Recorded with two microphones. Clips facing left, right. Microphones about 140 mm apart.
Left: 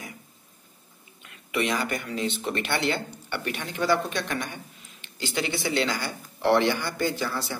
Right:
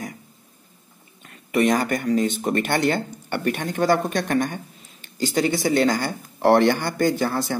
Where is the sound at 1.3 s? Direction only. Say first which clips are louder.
Right 8 dB; 45° right (ahead or behind).